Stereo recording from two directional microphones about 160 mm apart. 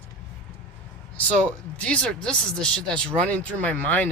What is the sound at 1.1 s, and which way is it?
Speech, 5° left (ahead or behind).